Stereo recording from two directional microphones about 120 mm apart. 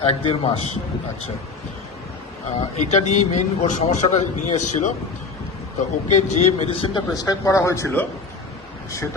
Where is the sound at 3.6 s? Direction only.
90° left.